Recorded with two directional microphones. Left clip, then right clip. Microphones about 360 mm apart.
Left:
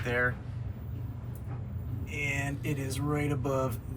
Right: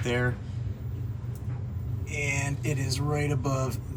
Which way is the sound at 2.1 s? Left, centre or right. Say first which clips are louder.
Right 3 dB; centre.